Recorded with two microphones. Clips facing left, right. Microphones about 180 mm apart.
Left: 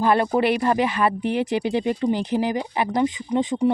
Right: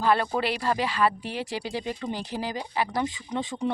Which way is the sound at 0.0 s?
20° left (ahead or behind).